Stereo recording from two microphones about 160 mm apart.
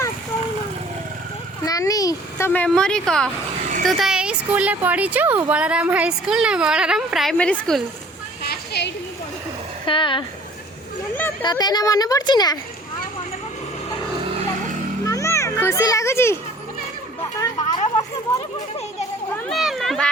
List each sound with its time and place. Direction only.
1.6 s a child's voice: 20° left (ahead or behind)
2.5 s a woman's voice: 5° left (ahead or behind)
8.4 s a sound: 90° left
9.8 s speech: 30° left (ahead or behind)
11.4 s a woman's voice: 25° left (ahead or behind)
15.0 s children playing: 20° left (ahead or behind)
17.3 s a sound: 25° left (ahead or behind)
19.5 s cat: centre (ahead or behind)